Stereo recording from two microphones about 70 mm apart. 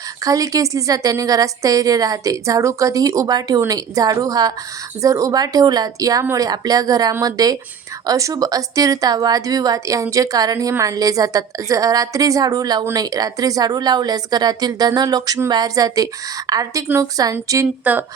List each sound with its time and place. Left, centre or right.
0.3 s a woman's voice: right
3.7 s a woman's voice: right
5.0 s a woman's voice: right
17.9 s speech: right